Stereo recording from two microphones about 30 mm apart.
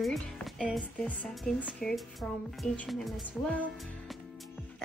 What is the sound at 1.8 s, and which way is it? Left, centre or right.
Music, left.